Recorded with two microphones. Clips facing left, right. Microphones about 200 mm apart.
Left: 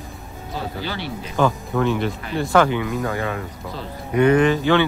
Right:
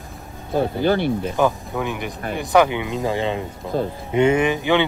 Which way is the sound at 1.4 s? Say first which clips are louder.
Left 4 dB; 15° right (ahead or behind).